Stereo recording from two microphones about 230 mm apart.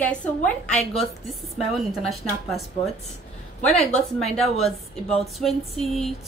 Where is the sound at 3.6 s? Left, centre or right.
Centre.